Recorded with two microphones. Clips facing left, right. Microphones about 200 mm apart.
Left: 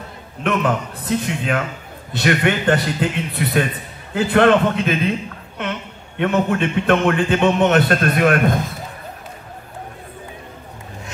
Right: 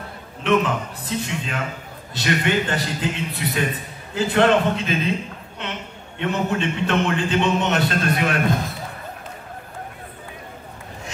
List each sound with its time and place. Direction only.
0.4 s a man's voice: 55° left (ahead or behind)